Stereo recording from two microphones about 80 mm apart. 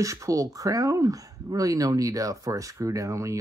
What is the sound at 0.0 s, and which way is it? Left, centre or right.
Speech, right.